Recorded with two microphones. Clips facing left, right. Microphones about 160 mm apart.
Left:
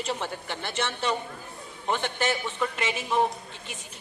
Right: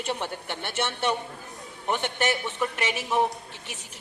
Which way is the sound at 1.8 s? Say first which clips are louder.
Right 1 dB; 10° right (ahead or behind).